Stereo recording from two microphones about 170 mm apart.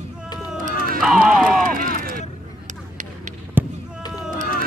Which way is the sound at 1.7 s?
55° right (ahead or behind).